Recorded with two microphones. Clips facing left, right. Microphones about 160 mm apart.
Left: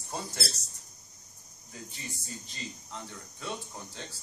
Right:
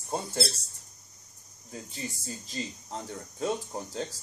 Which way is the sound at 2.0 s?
35° right (ahead or behind).